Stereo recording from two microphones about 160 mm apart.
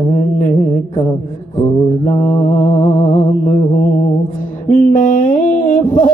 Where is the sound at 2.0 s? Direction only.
45° left (ahead or behind).